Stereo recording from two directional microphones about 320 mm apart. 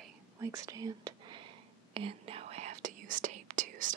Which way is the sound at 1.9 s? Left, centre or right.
Centre.